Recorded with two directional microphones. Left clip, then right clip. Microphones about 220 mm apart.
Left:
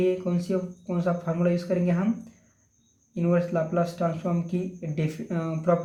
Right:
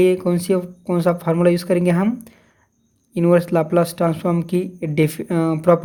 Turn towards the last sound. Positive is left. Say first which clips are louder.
# right 10 dB
turn(degrees=-50)  # may be behind; listen again after turning